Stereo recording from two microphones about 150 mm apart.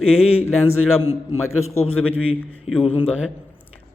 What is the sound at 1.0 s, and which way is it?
Speech, 15° right (ahead or behind).